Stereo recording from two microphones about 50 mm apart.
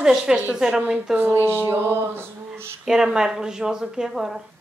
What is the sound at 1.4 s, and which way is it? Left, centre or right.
Music, right.